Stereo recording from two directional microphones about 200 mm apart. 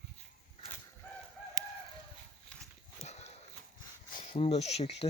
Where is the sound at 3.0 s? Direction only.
35° left (ahead or behind).